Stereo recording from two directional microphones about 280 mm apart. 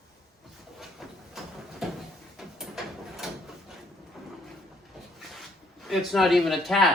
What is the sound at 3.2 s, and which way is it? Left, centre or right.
Drawer open or close, centre.